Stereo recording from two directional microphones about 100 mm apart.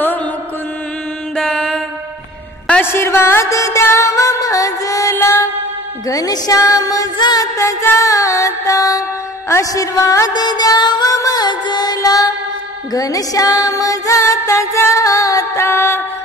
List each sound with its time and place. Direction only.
1.3 s mantra: 10° left (ahead or behind)
2.8 s music: 25° left (ahead or behind)
5.1 s mantra: 25° left (ahead or behind)
6.0 s music: 35° left (ahead or behind)